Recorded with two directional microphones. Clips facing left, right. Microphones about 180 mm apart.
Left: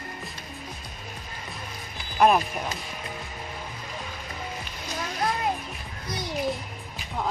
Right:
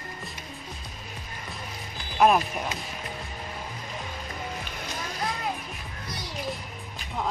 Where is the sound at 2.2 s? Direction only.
Centre (ahead or behind).